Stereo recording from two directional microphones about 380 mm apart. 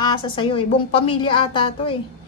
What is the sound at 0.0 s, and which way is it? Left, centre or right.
A woman's voice, centre.